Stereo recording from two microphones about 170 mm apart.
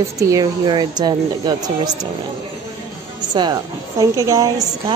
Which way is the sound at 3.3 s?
25° right (ahead or behind).